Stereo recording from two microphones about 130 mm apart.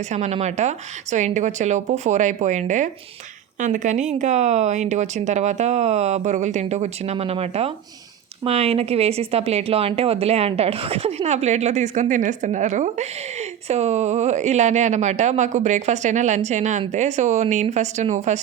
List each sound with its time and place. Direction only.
0.1 s a woman's voice: 60° right (ahead or behind)